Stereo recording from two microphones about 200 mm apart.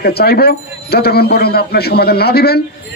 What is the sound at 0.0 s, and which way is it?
Speech, 50° left (ahead or behind).